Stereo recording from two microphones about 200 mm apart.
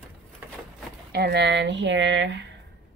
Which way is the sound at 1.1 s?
55° right (ahead or behind).